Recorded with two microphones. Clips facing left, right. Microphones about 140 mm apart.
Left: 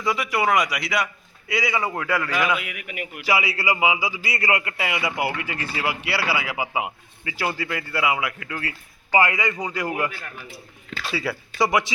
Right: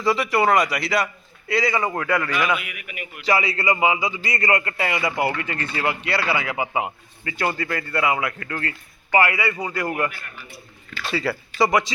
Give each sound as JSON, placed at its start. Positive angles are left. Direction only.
{"t": 0.0, "sound": "a man's voice", "side_deg": 0}
{"t": 2.6, "sound": "a man's voice", "side_deg": 90}
{"t": 3.2, "sound": "speech", "side_deg": 5}
{"t": 11.0, "sound": "a man's voice", "side_deg": 0}